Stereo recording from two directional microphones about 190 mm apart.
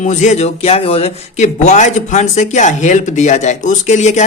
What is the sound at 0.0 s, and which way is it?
Speech, 40° left (ahead or behind).